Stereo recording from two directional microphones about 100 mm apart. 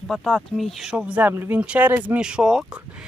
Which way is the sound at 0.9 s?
10° right (ahead or behind).